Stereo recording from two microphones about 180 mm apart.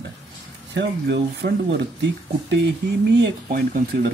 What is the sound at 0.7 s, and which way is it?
Speech, 70° right (ahead or behind).